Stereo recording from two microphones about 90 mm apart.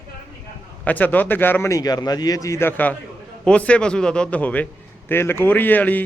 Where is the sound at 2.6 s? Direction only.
20° left (ahead or behind).